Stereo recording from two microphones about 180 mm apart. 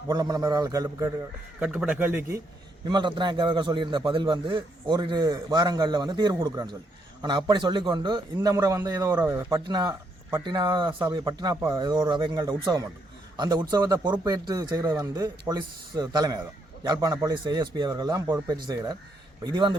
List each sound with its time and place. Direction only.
0.1 s a man's voice: 20° right (ahead or behind)
1.5 s speech: 5° right (ahead or behind)
2.9 s a man's voice: 25° right (ahead or behind)
9.6 s a man's voice: 20° right (ahead or behind)